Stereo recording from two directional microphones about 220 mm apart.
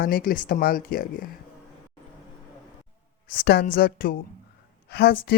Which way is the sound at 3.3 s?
45° left (ahead or behind).